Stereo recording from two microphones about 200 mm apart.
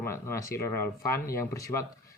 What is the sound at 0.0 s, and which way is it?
Speech, 15° left (ahead or behind).